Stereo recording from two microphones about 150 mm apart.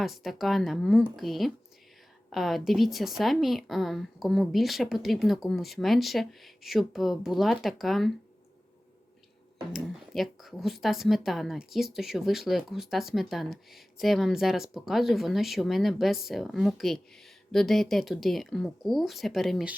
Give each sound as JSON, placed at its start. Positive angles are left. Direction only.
{"t": 0.0, "sound": "speech", "side_deg": 0}
{"t": 9.7, "sound": "speech", "side_deg": 0}